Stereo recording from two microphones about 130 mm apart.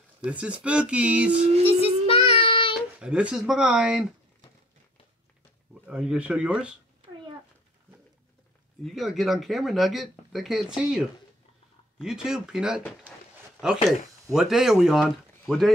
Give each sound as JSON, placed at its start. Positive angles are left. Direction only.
{"t": 0.2, "sound": "speech", "side_deg": -10}
{"t": 1.7, "sound": "child singing", "side_deg": 50}
{"t": 2.7, "sound": "speech", "side_deg": -5}
{"t": 5.9, "sound": "speech", "side_deg": -5}
{"t": 8.8, "sound": "speech", "side_deg": 0}